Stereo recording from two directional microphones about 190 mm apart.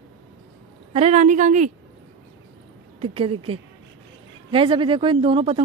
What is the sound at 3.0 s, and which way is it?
Speech, 30° right (ahead or behind).